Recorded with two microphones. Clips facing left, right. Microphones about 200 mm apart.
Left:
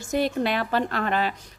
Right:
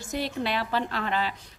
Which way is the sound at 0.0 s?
50° left (ahead or behind).